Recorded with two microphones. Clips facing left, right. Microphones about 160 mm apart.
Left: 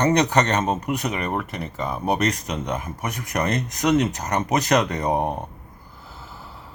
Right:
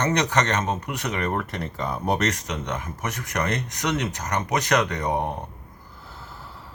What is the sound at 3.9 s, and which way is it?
Speech, 30° left (ahead or behind).